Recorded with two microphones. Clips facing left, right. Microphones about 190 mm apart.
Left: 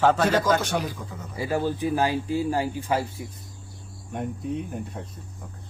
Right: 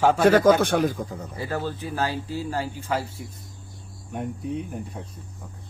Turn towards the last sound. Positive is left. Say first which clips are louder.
# left 1 dB
turn(degrees=-10)  # may be behind; listen again after turning